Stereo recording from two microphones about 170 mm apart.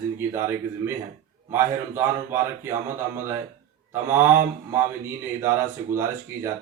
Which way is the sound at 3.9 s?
15° right (ahead or behind).